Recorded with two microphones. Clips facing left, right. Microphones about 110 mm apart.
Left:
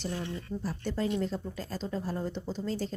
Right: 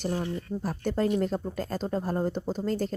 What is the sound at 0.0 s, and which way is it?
Speech, 45° right (ahead or behind).